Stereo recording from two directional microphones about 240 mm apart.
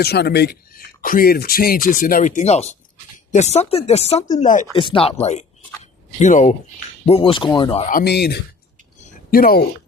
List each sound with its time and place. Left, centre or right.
0.0 s speech: left
7.9 s speech: left
9.0 s a sound: left